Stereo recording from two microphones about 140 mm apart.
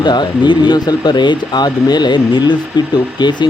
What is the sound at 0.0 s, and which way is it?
Speech, 30° left (ahead or behind).